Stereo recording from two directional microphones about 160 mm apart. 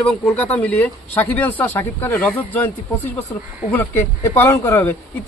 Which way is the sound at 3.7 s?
20° left (ahead or behind).